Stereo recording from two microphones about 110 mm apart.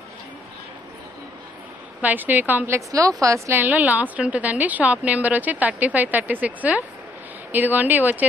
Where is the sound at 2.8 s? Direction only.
30° right (ahead or behind).